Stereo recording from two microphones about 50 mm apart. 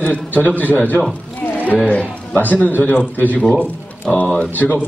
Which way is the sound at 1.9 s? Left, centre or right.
Left.